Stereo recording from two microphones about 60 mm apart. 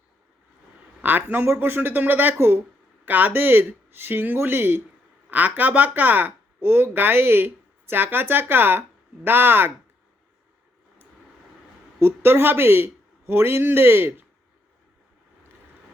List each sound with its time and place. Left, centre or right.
1.0 s speech: right
11.9 s speech: right